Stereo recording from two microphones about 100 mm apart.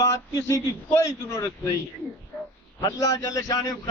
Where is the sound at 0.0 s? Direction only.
30° left (ahead or behind).